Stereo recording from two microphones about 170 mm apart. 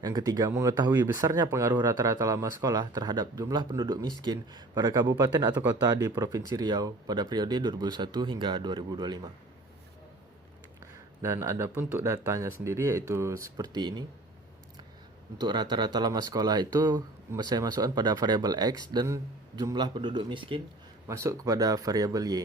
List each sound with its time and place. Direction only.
0.0 s speech: 20° right (ahead or behind)
10.8 s speech: 15° right (ahead or behind)
15.4 s speech: 25° right (ahead or behind)
21.1 s speech: 15° right (ahead or behind)